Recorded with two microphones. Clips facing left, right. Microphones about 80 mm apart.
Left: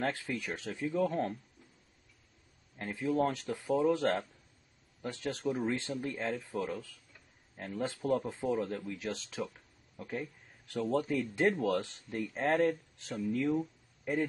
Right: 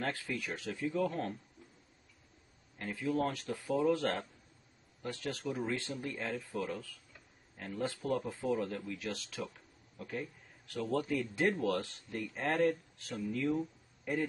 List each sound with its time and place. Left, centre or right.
0.0 s speech: left
2.8 s speech: left
10.7 s speech: left
13.5 s a sound: centre